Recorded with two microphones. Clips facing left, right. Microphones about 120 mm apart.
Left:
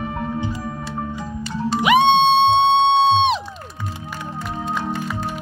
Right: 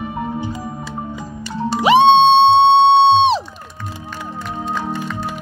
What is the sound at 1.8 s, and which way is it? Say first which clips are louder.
Music: right 4 dB; 30° right (ahead or behind).